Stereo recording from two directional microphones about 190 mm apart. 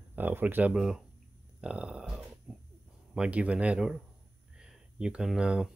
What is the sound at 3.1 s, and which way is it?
Speech, 5° right (ahead or behind).